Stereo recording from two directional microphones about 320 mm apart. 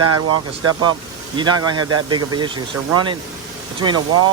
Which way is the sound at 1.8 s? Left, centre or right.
Right.